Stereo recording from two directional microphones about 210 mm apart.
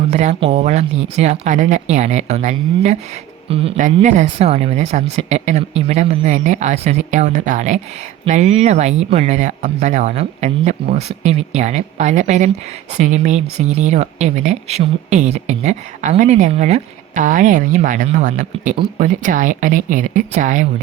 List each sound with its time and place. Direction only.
0.1 s speech: 30° right (ahead or behind)